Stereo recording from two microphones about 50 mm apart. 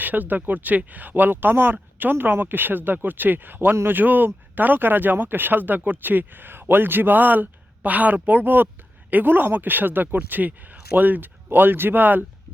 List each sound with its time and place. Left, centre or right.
0.0 s speech: right